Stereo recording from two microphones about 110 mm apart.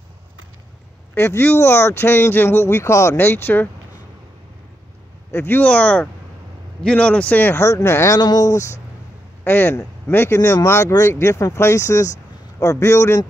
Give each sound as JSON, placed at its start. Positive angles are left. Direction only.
{"t": 1.1, "sound": "speech", "side_deg": 20}
{"t": 5.3, "sound": "speech", "side_deg": 20}
{"t": 8.2, "sound": "speech", "side_deg": 35}
{"t": 9.4, "sound": "speech", "side_deg": 20}